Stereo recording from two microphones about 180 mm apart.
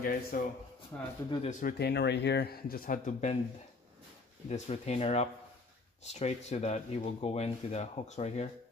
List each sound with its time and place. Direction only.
0.0 s speech: 50° left (ahead or behind)
0.9 s speech: 10° left (ahead or behind)
1.5 s speech: 55° left (ahead or behind)
4.5 s speech: 40° left (ahead or behind)